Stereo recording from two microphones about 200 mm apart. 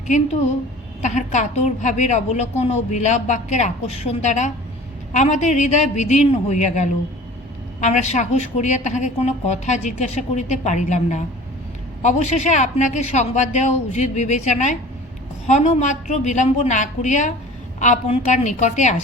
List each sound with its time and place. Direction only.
1.0 s a woman's voice: 35° left (ahead or behind)